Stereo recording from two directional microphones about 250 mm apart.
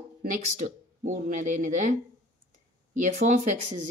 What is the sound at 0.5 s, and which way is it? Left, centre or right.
Speech, right.